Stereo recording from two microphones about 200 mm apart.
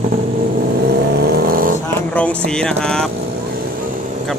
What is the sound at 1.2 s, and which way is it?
Vehicle, 55° right (ahead or behind).